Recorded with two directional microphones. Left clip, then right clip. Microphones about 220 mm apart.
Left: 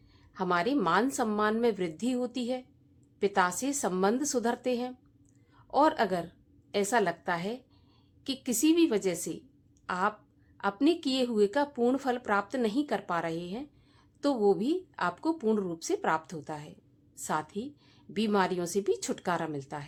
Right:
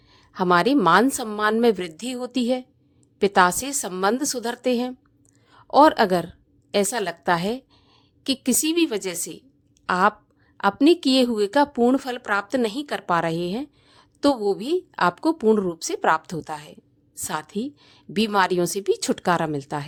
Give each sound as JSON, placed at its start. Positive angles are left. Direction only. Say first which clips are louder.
{"t": 0.1, "sound": "a woman's voice", "louder": "right 10 dB", "side_deg": -35}